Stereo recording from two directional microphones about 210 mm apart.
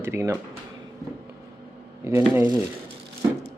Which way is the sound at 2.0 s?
10° right (ahead or behind).